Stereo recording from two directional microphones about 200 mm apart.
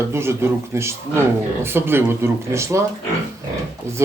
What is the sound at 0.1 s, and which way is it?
A man's voice, 10° right (ahead or behind).